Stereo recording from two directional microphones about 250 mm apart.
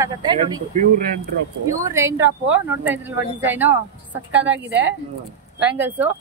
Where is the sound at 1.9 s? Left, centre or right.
Centre.